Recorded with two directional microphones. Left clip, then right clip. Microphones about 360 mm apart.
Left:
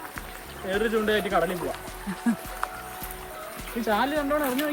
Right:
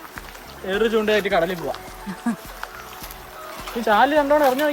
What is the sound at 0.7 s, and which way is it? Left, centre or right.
Speech, right.